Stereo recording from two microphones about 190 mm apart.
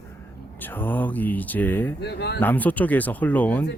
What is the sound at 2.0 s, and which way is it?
Speech, 60° left (ahead or behind).